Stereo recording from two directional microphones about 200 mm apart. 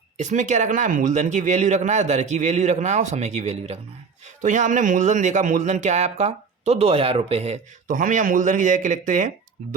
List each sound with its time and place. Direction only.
0.2 s speech: 35° right (ahead or behind)